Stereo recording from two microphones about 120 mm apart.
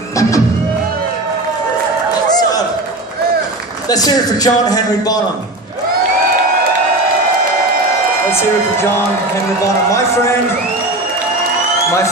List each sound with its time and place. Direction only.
3.9 s a man's voice: 30° left (ahead or behind)
8.3 s a woman's voice: 20° left (ahead or behind)
9.8 s a woman's voice: 25° left (ahead or behind)